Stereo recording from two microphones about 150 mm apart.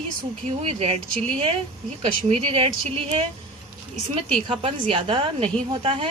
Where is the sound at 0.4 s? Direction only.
45° right (ahead or behind).